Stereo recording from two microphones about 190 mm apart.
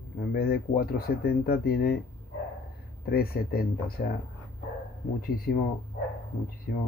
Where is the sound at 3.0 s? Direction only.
55° left (ahead or behind).